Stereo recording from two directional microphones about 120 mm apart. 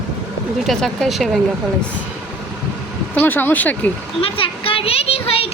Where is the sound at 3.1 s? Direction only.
15° left (ahead or behind).